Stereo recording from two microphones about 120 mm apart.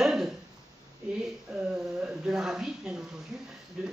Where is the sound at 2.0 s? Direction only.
5° right (ahead or behind).